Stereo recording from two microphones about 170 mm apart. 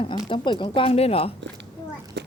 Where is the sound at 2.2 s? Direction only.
80° right.